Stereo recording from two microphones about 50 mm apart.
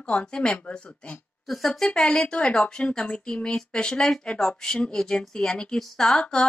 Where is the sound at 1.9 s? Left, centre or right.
Centre.